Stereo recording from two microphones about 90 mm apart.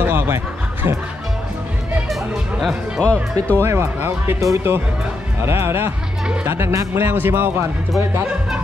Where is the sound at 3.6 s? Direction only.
30° right (ahead or behind).